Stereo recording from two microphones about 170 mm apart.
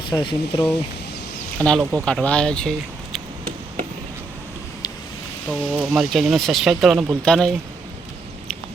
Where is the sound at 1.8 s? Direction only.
10° right (ahead or behind).